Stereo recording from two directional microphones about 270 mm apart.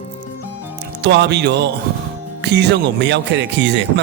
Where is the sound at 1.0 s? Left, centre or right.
Right.